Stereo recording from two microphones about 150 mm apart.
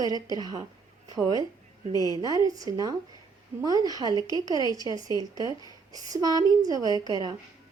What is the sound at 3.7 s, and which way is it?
Speech, 25° left (ahead or behind).